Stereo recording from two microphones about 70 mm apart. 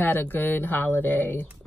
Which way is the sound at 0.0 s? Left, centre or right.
Left.